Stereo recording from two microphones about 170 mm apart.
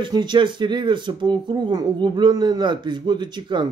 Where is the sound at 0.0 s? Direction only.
25° right (ahead or behind).